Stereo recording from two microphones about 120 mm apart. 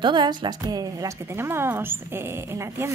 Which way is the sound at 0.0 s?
40° right (ahead or behind).